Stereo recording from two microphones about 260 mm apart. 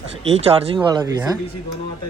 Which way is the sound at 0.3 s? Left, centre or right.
Right.